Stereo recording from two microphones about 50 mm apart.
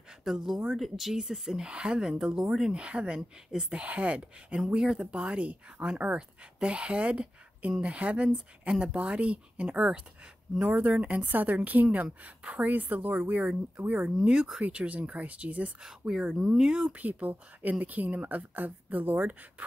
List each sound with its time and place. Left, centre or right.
0.2 s speech: centre
1.6 s speech: centre; by 13.2 s right
13.2 s speech: right
15.8 s speech: centre
16.8 s speech: right